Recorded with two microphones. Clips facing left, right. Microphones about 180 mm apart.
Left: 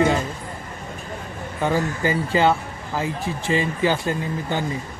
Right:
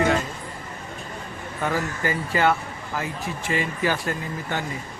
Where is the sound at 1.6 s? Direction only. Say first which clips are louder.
Left 4 dB; 25° left (ahead or behind).